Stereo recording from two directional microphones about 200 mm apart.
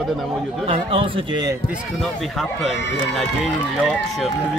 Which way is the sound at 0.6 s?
30° right (ahead or behind).